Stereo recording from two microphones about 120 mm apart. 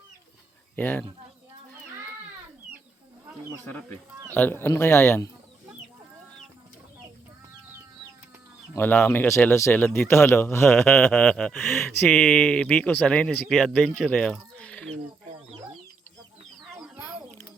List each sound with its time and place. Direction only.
0.8 s speech: 15° left (ahead or behind)
4.4 s speech: 20° left (ahead or behind)
8.7 s speech: 15° left (ahead or behind)
10.8 s a sound: 5° left (ahead or behind)
11.0 s speech: 15° left (ahead or behind)
11.9 s speech: 10° left (ahead or behind)